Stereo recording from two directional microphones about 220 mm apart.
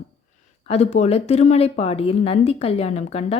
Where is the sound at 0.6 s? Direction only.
30° left (ahead or behind).